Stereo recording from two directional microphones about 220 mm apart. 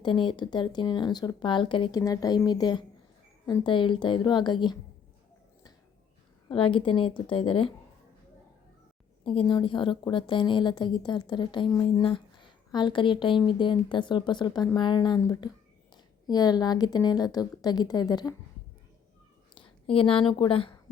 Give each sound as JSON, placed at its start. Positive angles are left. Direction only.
{"t": 0.0, "sound": "a woman's voice", "side_deg": 20}
{"t": 6.5, "sound": "a woman's voice", "side_deg": 25}
{"t": 9.2, "sound": "a woman's voice", "side_deg": 25}
{"t": 19.5, "sound": "speech", "side_deg": 25}